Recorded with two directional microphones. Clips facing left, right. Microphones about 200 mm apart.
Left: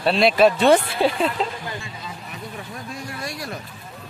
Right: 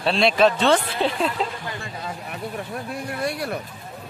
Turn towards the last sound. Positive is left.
turn(degrees=-60)  # may be behind; listen again after turning